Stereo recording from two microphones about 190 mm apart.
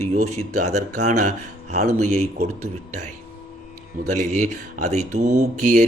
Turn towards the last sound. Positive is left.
turn(degrees=-40)  # may be behind; listen again after turning